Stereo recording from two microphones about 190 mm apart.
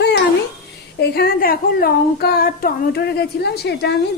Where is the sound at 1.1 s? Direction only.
55° left (ahead or behind).